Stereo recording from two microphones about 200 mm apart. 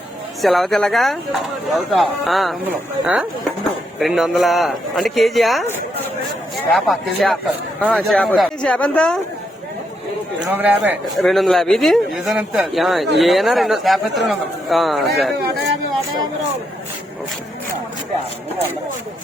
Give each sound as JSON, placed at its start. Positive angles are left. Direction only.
{"t": 0.4, "sound": "speech", "side_deg": 0}
{"t": 6.7, "sound": "speech", "side_deg": 0}
{"t": 10.4, "sound": "a man's voice", "side_deg": -10}